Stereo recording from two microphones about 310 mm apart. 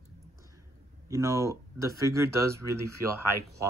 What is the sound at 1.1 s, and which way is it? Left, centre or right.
Speech, centre.